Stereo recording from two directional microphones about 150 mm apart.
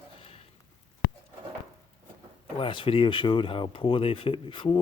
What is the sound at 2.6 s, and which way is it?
Speech, 35° left (ahead or behind).